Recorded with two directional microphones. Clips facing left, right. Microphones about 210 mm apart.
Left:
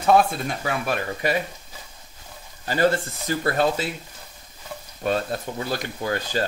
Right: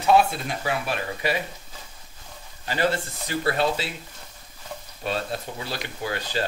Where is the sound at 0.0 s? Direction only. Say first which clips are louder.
Left 1 dB; 50° left (ahead or behind).